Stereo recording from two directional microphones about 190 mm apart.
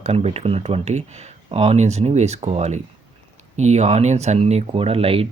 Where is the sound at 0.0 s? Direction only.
35° right (ahead or behind).